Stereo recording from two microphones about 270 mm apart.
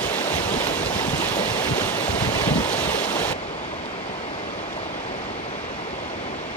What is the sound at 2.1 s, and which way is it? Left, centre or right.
Wind noise, left.